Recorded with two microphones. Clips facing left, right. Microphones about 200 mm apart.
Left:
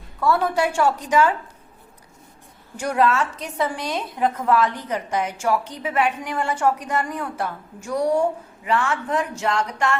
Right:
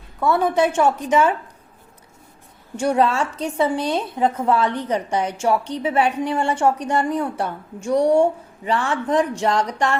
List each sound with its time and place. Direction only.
0.2 s a woman's voice: 20° right (ahead or behind)
2.7 s a woman's voice: 30° right (ahead or behind)